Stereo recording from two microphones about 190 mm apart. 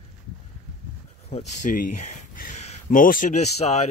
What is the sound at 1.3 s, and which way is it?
Speech, 40° left (ahead or behind).